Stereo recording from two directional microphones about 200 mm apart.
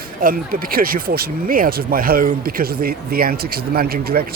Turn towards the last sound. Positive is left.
turn(degrees=-50)  # may be behind; listen again after turning